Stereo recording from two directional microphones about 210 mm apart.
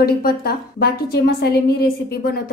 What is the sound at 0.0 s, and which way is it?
A woman's voice, 45° left (ahead or behind).